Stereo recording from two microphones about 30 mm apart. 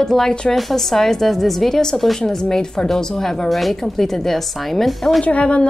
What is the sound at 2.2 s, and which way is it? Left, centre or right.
Speech, centre.